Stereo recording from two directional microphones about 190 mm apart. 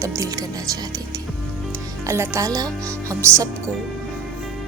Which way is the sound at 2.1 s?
15° right (ahead or behind).